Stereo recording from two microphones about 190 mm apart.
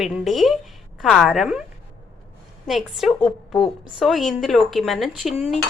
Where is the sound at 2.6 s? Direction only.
Centre (ahead or behind).